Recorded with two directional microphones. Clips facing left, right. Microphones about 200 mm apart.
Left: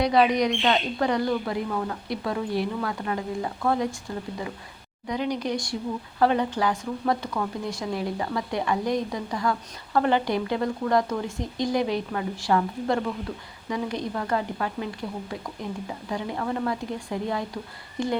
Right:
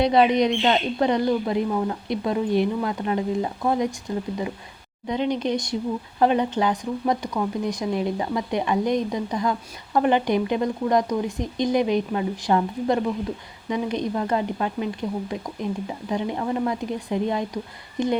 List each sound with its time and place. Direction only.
0.0 s speech: 25° right (ahead or behind)